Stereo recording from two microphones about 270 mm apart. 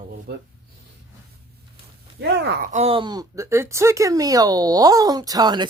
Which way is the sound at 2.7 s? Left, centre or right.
Right.